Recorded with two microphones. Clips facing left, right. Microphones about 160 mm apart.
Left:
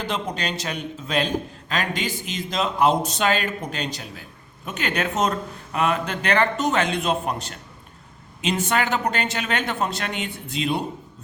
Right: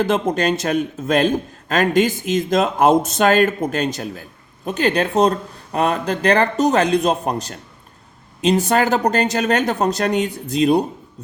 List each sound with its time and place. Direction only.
0.0 s a man's voice: 50° right (ahead or behind)